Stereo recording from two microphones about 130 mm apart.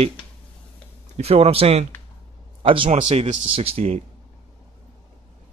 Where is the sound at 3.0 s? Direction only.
60° right (ahead or behind).